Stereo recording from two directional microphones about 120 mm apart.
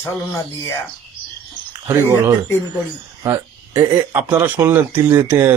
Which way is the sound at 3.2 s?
35° right (ahead or behind).